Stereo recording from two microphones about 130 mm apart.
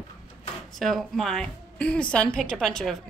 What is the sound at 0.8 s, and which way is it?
A woman's voice, centre (ahead or behind).